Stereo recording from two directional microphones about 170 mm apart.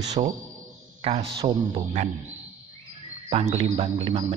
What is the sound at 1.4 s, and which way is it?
Speech, 35° right (ahead or behind).